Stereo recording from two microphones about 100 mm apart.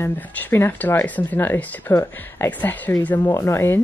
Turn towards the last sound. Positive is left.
turn(degrees=25)  # may be behind; listen again after turning